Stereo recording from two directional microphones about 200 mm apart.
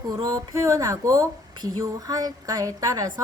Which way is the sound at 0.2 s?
15° right (ahead or behind).